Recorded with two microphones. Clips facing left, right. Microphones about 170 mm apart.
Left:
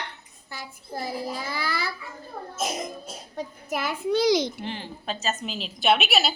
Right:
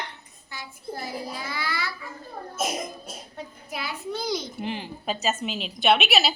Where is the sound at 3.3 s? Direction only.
45° left (ahead or behind).